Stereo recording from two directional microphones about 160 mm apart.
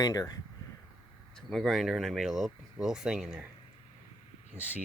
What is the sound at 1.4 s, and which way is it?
Speech, 5° left (ahead or behind).